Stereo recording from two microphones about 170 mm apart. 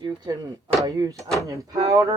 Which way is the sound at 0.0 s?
25° right (ahead or behind).